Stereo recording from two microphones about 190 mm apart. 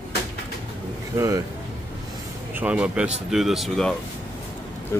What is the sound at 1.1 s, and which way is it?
Speech, 15° right (ahead or behind).